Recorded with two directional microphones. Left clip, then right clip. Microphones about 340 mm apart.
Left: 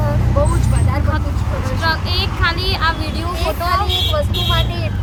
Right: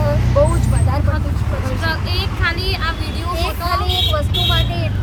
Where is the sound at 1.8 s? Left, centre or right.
Centre.